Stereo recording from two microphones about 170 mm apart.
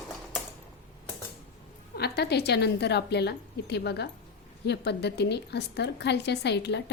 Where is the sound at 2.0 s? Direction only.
70° left (ahead or behind); by 6.9 s 90° left.